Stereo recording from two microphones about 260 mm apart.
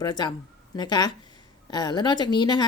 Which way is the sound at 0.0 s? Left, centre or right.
Centre.